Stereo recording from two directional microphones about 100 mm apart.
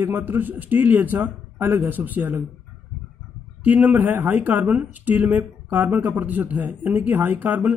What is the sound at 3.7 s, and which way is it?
Speech, 15° right (ahead or behind).